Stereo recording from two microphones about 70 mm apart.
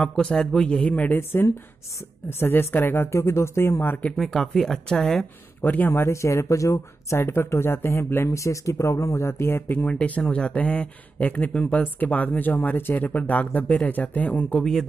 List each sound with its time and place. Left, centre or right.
0.0 s speech: centre
2.2 s speech: left
4.2 s speech: centre
5.6 s speech: left
7.2 s speech: left
9.9 s speech: centre
14.6 s speech: centre